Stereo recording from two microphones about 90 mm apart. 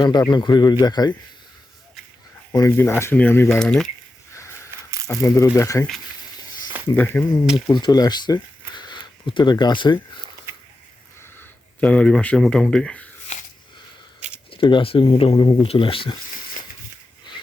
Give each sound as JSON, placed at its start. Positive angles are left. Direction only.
{"t": 0.0, "sound": "speech", "side_deg": 55}
{"t": 2.6, "sound": "speech", "side_deg": 25}
{"t": 3.6, "sound": "speech", "side_deg": 5}
{"t": 5.0, "sound": "speech", "side_deg": 35}
{"t": 6.9, "sound": "speech", "side_deg": 20}
{"t": 7.7, "sound": "speech", "side_deg": 50}
{"t": 11.2, "sound": "speech", "side_deg": 20}
{"t": 14.5, "sound": "speech", "side_deg": 70}